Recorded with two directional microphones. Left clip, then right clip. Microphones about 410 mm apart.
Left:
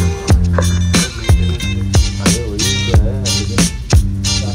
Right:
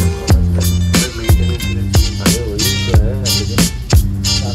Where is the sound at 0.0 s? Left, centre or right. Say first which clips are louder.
Even; centre.